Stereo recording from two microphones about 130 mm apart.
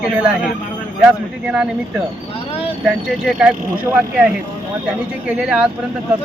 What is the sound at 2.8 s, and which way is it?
Speech, 5° right (ahead or behind).